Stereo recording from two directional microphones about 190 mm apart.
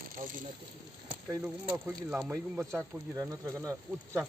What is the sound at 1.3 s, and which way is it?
Speech, 10° right (ahead or behind).